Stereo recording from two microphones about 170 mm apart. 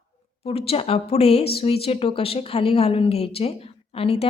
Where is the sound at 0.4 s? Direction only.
35° left (ahead or behind).